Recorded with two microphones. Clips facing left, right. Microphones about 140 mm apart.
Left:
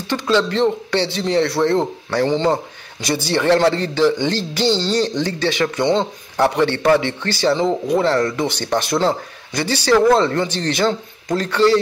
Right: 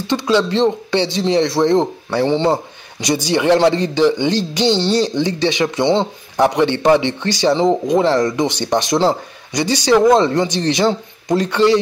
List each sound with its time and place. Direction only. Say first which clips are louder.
0.0 s a man's voice: right 2 dB; 15° right (ahead or behind)